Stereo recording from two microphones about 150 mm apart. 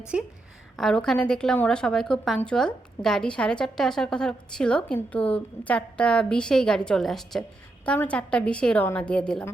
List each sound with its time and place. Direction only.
0.1 s a woman's voice: 5° right (ahead or behind)
0.8 s a woman's voice: 5° left (ahead or behind)